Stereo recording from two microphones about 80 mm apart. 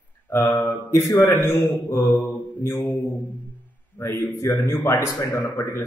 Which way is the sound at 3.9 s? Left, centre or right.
Left.